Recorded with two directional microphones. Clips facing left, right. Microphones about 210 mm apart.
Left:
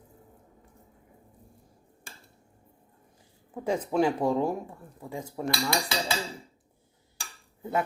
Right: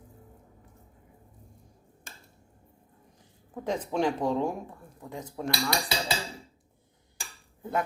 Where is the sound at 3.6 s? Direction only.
10° left (ahead or behind).